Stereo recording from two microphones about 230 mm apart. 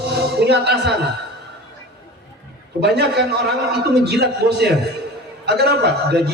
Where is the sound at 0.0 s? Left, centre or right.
Right.